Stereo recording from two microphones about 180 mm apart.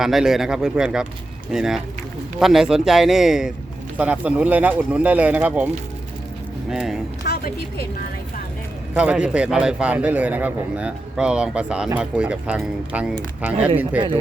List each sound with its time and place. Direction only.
0.0 s a man's voice: centre (ahead or behind)
6.7 s speech: centre (ahead or behind)
7.3 s a woman's voice: 60° left (ahead or behind)
9.0 s a man's voice: 5° right (ahead or behind)